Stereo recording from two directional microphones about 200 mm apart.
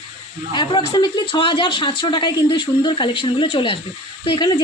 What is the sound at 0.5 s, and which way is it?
Speech, 25° left (ahead or behind).